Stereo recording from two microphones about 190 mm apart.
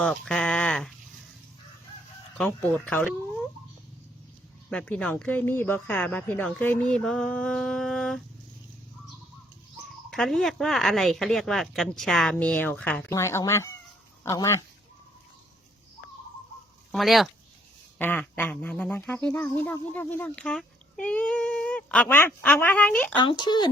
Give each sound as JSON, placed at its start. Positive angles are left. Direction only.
{"t": 0.0, "sound": "a sound", "side_deg": 5}
{"t": 2.4, "sound": "speech", "side_deg": 5}
{"t": 4.7, "sound": "speech", "side_deg": 5}
{"t": 10.1, "sound": "speech", "side_deg": 0}
{"t": 16.9, "sound": "speech", "side_deg": 0}
{"t": 23.1, "sound": "speech", "side_deg": 25}